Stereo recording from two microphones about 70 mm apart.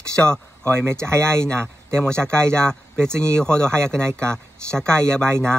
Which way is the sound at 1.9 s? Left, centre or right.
Centre.